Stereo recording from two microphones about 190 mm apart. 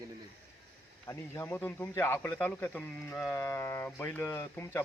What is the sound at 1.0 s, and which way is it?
A man's voice, 10° left (ahead or behind).